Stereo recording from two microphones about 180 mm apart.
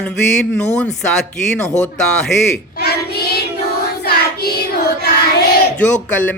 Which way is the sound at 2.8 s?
60° left (ahead or behind).